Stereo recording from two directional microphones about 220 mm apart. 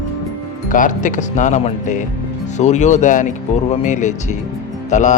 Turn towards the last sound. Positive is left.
turn(degrees=35)  # may be behind; listen again after turning